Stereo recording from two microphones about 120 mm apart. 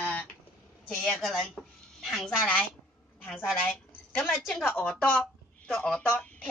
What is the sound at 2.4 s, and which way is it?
Speech, 10° left (ahead or behind).